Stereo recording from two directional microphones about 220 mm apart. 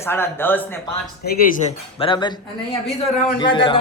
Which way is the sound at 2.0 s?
20° left (ahead or behind).